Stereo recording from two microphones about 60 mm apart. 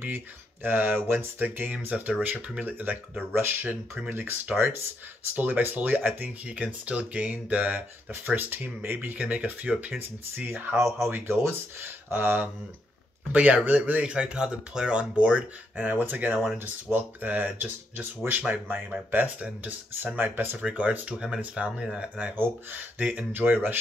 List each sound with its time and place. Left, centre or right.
0.0 s speech: right
1.9 s speech: right
19.4 s speech: right
22.4 s speech: right